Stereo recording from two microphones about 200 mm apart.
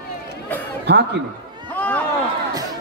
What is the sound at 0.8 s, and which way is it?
Chuckle, 55° right (ahead or behind).